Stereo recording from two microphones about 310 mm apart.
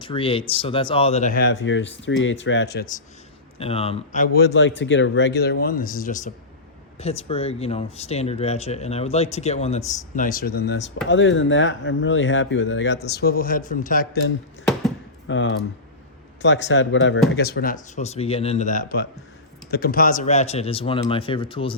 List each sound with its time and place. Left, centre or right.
0.0 s speech: centre
3.6 s speech: centre